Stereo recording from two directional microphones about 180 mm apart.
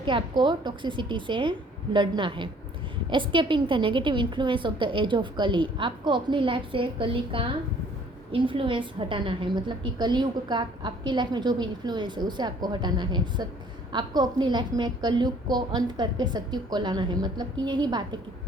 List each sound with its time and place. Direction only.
0.0 s a woman's voice: 25° right (ahead or behind)